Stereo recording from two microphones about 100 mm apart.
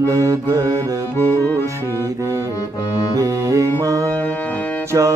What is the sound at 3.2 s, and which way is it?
Music, 35° right (ahead or behind).